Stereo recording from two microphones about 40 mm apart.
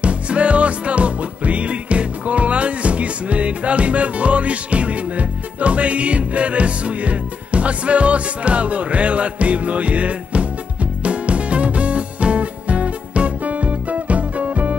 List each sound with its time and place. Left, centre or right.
0.0 s music: right